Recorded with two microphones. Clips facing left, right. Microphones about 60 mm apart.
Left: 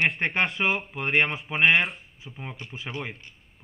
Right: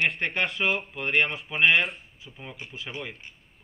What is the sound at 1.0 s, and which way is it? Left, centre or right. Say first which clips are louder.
Speech: left 1 dB; left.